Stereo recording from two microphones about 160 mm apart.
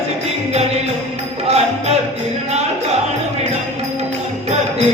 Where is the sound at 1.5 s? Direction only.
40° right (ahead or behind).